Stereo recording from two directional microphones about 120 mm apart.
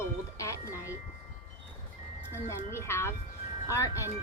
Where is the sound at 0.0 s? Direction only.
25° left (ahead or behind).